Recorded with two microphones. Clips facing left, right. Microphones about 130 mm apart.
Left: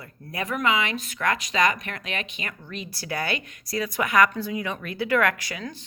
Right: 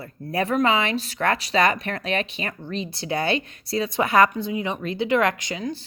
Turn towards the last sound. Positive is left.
turn(degrees=-25)  # may be behind; listen again after turning